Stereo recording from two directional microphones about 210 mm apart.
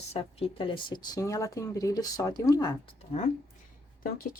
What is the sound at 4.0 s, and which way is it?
Speech, 45° left (ahead or behind).